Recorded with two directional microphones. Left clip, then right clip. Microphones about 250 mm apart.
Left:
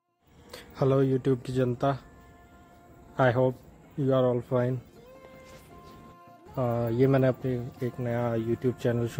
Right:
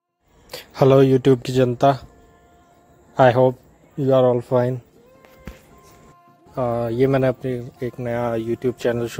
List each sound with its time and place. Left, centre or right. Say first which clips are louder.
0.5 s speech: right 11 dB; right
3.2 s speech: right 10 dB; right
6.5 s speech: right 7 dB; right